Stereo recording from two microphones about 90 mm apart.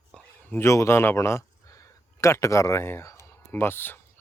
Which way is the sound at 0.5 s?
30° left (ahead or behind).